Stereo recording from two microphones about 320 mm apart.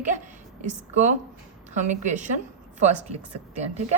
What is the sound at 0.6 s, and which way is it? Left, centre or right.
Speech, right.